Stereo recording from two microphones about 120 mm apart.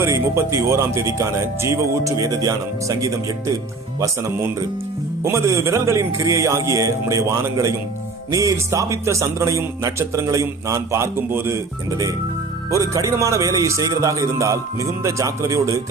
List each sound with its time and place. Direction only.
0.0 s speech: 25° right (ahead or behind)
5.2 s speech: 25° right (ahead or behind)